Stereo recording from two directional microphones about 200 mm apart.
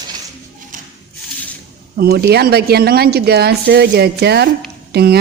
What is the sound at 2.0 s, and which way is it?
A woman's voice, 50° right (ahead or behind).